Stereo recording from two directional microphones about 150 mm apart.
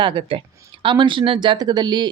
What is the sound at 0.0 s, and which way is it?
Speech, 35° right (ahead or behind).